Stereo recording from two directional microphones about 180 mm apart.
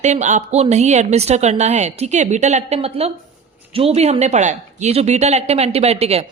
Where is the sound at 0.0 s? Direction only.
40° right (ahead or behind).